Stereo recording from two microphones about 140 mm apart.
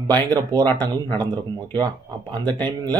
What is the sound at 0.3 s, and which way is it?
Speech, 30° right (ahead or behind).